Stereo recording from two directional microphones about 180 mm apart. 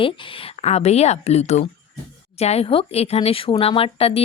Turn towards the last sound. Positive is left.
turn(degrees=35)  # may be behind; listen again after turning